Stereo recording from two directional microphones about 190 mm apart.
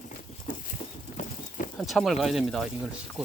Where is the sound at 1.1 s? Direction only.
45° left (ahead or behind).